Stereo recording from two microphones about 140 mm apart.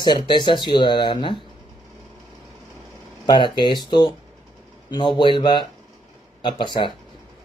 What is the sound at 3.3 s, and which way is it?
Speech, 35° left (ahead or behind).